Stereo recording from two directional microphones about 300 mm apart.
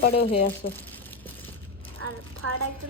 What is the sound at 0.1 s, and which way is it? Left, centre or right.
Speech, centre.